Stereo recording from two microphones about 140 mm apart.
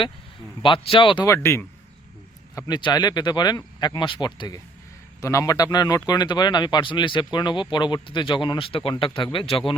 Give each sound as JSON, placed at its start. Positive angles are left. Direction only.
{"t": 0.6, "sound": "speech", "side_deg": 35}
{"t": 1.2, "sound": "speech", "side_deg": 20}
{"t": 2.6, "sound": "speech", "side_deg": 30}